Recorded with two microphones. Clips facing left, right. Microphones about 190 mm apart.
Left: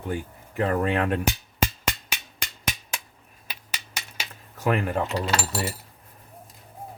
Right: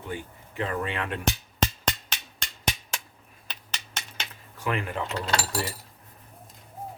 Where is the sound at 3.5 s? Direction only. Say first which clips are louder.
Left 1 dB; 10° left (ahead or behind).